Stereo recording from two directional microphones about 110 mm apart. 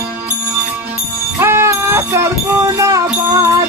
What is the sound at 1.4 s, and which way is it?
Music, 25° right (ahead or behind).